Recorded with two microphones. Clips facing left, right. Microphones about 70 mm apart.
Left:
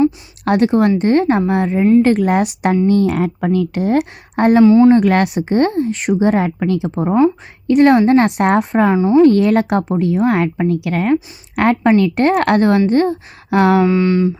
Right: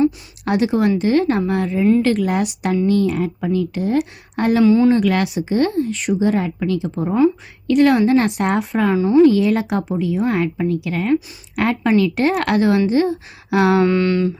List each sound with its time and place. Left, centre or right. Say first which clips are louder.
0.4 s speech: left 4 dB; left
4.6 s speech: left 4 dB; left
4.9 s speech: left 5 dB; left
7.0 s speech: left 3 dB; left
8.0 s a woman's voice: left 4 dB; left
8.9 s speech: left 1 dB; left
9.2 s a woman's voice: left 3 dB; left
13.7 s a sound: left 2 dB; centre
14.1 s speech: left 3 dB; centre